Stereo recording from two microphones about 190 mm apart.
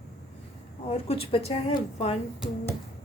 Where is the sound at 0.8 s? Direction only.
30° left (ahead or behind).